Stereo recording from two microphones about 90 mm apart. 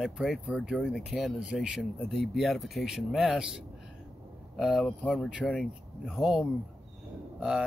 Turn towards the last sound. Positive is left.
turn(degrees=-10)  # may be behind; listen again after turning